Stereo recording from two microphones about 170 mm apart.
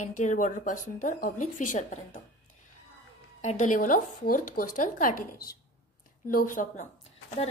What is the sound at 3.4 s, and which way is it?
A woman's voice, 45° left (ahead or behind).